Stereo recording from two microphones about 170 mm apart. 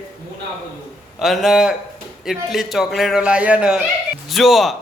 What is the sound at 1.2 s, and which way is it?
A man's voice, centre (ahead or behind).